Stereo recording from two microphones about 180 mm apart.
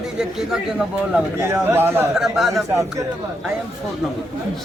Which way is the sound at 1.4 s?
15° right (ahead or behind).